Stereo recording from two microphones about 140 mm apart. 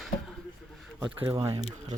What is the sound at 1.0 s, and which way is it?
Speech, 15° right (ahead or behind).